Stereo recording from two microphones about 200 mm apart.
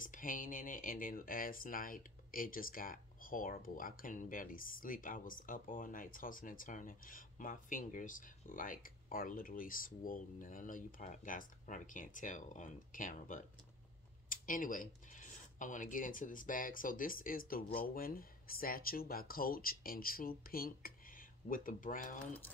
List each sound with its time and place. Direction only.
0.0 s speech: 40° left (ahead or behind)